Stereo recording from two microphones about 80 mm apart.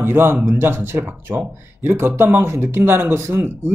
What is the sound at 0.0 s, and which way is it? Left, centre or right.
Speech, right.